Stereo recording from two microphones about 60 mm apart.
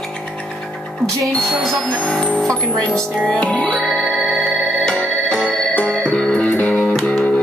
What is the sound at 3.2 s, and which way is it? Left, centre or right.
Music, left.